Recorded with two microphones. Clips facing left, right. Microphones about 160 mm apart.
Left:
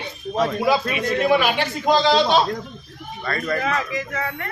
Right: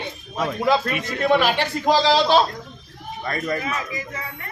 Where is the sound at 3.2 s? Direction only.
20° right (ahead or behind).